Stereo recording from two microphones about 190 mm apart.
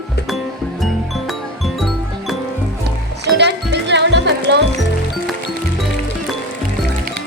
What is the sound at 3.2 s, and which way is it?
Music, 60° right (ahead or behind).